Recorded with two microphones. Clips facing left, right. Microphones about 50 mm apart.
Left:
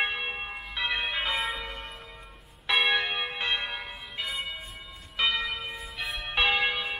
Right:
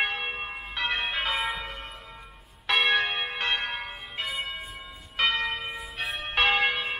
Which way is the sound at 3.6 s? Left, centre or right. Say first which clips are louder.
Right 2 dB; right.